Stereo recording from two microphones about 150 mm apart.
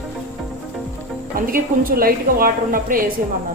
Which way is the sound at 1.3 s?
70° right (ahead or behind).